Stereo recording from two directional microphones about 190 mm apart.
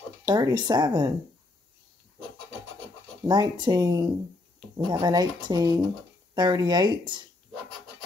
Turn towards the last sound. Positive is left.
turn(degrees=-20)  # may be behind; listen again after turning